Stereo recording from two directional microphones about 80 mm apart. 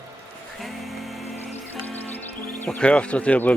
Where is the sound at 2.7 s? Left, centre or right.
Centre.